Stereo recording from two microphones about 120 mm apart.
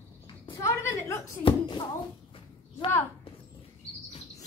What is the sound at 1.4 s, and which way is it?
Speech, 50° left (ahead or behind).